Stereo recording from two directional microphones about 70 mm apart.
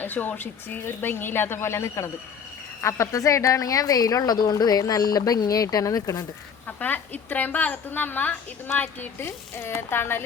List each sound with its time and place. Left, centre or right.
0.0 s a woman's voice: left
6.7 s speech: left